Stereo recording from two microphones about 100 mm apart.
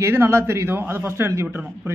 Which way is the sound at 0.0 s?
25° right (ahead or behind).